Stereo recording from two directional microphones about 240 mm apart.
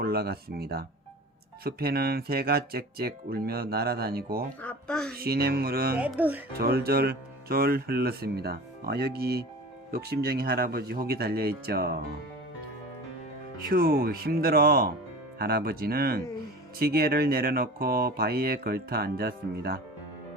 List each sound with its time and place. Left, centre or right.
0.0 s speech: right
4.6 s a child's voice: centre
5.1 s speech: right
6.0 s speech: centre
6.6 s speech: right
13.7 s speech: right